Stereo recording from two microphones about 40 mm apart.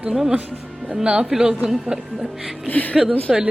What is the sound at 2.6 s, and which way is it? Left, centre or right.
Speech, left.